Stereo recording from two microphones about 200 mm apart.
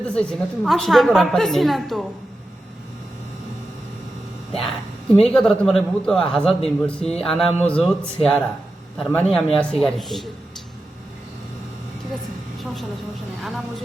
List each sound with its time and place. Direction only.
0.0 s a woman's voice: 5° left (ahead or behind)
4.5 s a woman's voice: centre (ahead or behind)
13.4 s a woman's voice: centre (ahead or behind)